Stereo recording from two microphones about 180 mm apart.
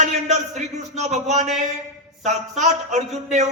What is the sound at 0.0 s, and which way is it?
A man's voice, 40° right (ahead or behind).